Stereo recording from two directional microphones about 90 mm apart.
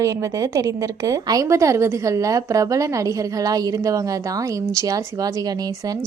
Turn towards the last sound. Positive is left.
turn(degrees=-40)  # may be behind; listen again after turning